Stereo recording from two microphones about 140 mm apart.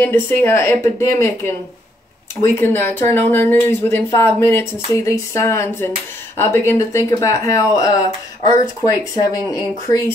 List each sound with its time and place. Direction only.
0.0 s speech: 15° left (ahead or behind)